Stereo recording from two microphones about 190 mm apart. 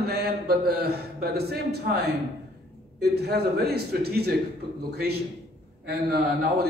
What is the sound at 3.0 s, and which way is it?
A man's voice, 55° right (ahead or behind).